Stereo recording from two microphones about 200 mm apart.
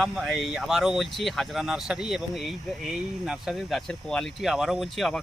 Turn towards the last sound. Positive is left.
turn(degrees=0)  # may be behind; listen again after turning